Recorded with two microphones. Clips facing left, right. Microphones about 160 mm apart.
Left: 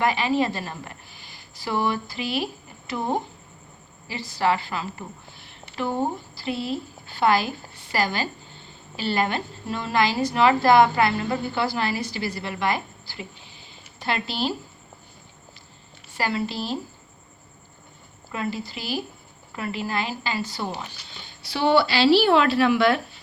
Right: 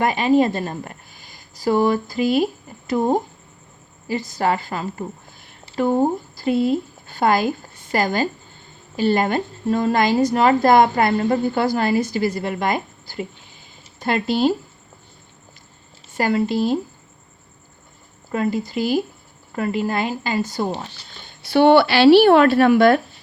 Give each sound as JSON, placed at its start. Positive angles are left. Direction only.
{"t": 0.0, "sound": "a woman's voice", "side_deg": -45}
{"t": 16.1, "sound": "a woman's voice", "side_deg": -45}
{"t": 18.3, "sound": "a woman's voice", "side_deg": -45}
{"t": 21.4, "sound": "speech", "side_deg": -60}